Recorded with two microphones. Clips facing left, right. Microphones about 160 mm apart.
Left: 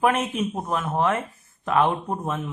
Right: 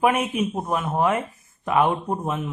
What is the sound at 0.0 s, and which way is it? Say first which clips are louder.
Speech: right 1 dB; 10° right (ahead or behind).